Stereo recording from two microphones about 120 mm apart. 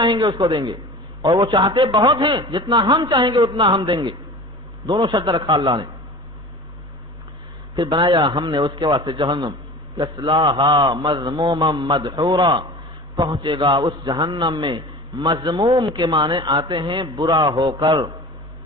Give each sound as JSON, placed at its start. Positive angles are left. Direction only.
{"t": 0.0, "sound": "a man's voice", "side_deg": -40}
{"t": 7.7, "sound": "a man's voice", "side_deg": -40}
{"t": 9.0, "sound": "a man's voice", "side_deg": -30}